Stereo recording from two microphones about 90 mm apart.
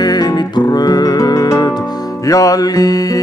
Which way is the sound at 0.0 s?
45° left (ahead or behind).